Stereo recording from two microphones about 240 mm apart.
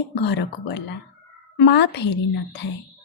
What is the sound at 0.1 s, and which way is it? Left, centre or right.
Speech, left.